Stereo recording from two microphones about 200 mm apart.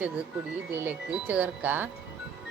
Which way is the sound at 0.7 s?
10° right (ahead or behind).